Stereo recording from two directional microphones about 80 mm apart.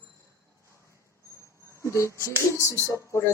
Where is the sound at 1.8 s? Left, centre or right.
Left.